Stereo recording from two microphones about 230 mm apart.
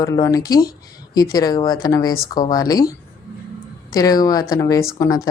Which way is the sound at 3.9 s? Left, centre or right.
Centre.